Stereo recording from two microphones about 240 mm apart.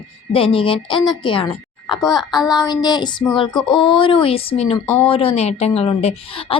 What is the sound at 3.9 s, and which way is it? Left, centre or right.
A woman's voice, left.